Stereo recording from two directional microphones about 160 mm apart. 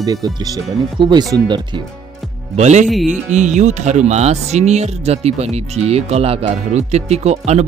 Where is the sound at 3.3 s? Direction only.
50° right (ahead or behind).